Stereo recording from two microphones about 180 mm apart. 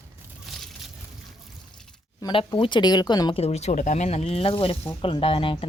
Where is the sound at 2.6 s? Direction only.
25° left (ahead or behind).